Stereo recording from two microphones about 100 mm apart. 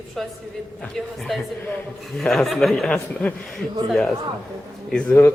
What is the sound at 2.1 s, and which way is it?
Speech, 5° left (ahead or behind).